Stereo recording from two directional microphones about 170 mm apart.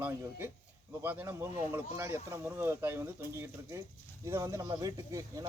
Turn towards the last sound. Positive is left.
turn(degrees=-20)  # may be behind; listen again after turning